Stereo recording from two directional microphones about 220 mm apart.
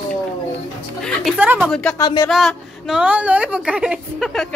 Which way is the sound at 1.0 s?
Centre (ahead or behind).